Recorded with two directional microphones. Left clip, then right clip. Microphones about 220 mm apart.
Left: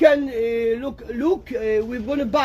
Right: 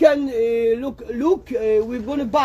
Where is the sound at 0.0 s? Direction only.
5° right (ahead or behind).